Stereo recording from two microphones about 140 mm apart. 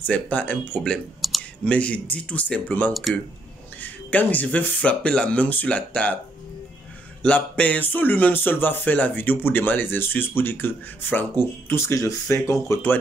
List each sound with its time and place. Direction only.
0.0 s speech: 10° left (ahead or behind)
0.9 s clicking: centre (ahead or behind)
1.7 s speech: 10° left (ahead or behind)
2.9 s speech: centre (ahead or behind)
3.8 s speech: 10° left (ahead or behind)
7.2 s speech: 10° left (ahead or behind)